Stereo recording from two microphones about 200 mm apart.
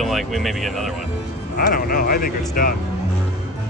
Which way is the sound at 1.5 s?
45° left (ahead or behind).